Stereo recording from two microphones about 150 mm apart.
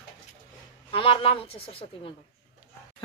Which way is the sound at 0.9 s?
35° left (ahead or behind).